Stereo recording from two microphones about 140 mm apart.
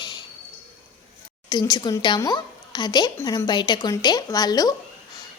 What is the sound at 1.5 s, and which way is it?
A woman's voice, 30° left (ahead or behind).